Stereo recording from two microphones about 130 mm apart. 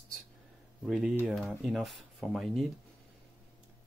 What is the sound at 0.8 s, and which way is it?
Speech, 5° right (ahead or behind).